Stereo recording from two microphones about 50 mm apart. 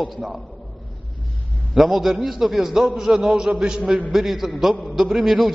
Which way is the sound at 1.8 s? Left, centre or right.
Centre.